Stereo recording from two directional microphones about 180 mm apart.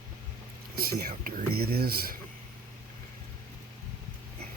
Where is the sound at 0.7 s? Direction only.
60° right (ahead or behind).